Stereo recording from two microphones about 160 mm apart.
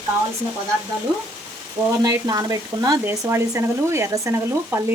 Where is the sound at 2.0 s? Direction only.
20° right (ahead or behind).